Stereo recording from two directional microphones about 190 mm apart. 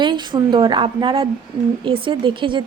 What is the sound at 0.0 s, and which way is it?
A woman's voice, 25° right (ahead or behind).